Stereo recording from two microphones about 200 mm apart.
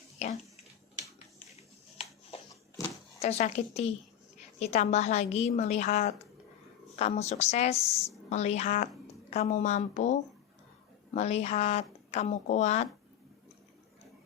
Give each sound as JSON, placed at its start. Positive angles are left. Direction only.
{"t": 0.2, "sound": "a woman's voice", "side_deg": 35}
{"t": 1.5, "sound": "a sound", "side_deg": 30}
{"t": 3.2, "sound": "a woman's voice", "side_deg": 35}